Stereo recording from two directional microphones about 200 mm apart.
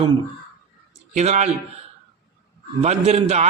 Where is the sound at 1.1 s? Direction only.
35° right (ahead or behind).